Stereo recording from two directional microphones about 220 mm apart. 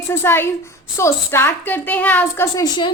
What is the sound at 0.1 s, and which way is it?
A woman's voice, 10° left (ahead or behind).